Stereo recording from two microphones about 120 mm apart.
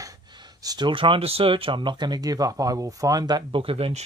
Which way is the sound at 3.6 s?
50° right (ahead or behind).